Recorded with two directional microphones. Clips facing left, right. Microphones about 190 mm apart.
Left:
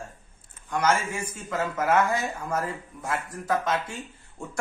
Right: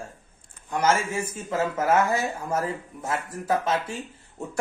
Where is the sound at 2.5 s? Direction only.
25° right (ahead or behind).